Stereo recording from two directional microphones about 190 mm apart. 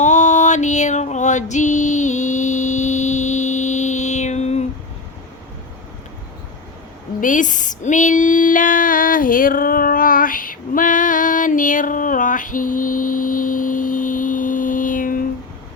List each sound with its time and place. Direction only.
0.0 s music: 40° left (ahead or behind)
7.2 s female singing: 40° left (ahead or behind)